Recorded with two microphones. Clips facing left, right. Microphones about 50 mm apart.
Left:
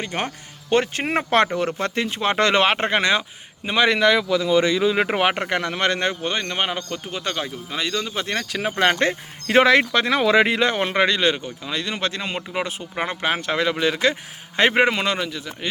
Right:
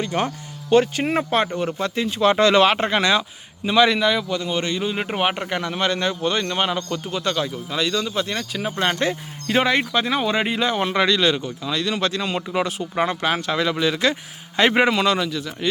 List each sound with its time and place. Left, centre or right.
0.0 s speech: left
1.3 s speech: left
1.8 s speech: left
3.9 s speech: left
5.0 s speech: left
5.3 s speech: left
6.2 s speech: left
8.3 s speech: left
10.6 s speech: left
10.9 s speech: left